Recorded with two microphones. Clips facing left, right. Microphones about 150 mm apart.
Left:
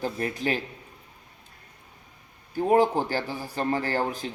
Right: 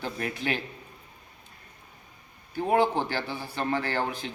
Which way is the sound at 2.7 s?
40° left (ahead or behind).